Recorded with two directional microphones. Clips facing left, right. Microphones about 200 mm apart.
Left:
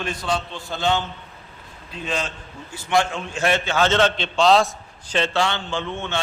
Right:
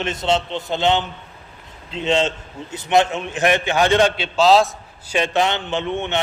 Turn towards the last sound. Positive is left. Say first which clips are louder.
# right 4 dB
turn(degrees=-20)  # may be behind; listen again after turning